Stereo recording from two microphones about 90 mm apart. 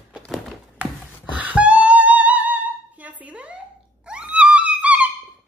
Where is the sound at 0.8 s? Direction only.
15° right (ahead or behind).